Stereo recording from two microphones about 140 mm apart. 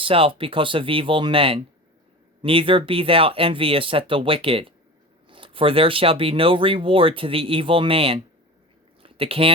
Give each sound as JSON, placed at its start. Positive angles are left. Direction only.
{"t": 0.0, "sound": "speech", "side_deg": -40}